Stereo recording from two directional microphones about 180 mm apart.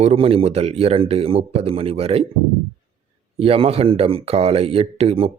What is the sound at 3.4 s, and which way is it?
Speech, 35° right (ahead or behind).